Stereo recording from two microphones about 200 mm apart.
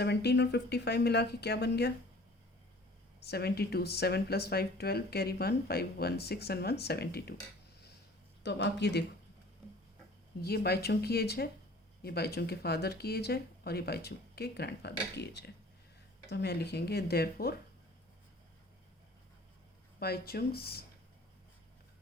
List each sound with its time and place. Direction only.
0.0 s speech: 55° left (ahead or behind)
3.2 s speech: 50° left (ahead or behind)
8.4 s speech: 60° left (ahead or behind)
10.4 s speech: 50° left (ahead or behind)
20.0 s speech: 50° left (ahead or behind)